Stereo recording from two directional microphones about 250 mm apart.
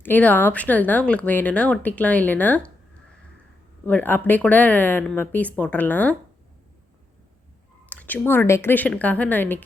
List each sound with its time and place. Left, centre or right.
0.0 s speech: centre
3.8 s speech: centre
7.9 s speech: centre